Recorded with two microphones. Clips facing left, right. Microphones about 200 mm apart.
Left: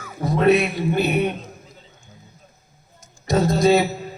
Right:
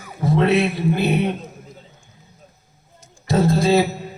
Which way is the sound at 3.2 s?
30° right (ahead or behind).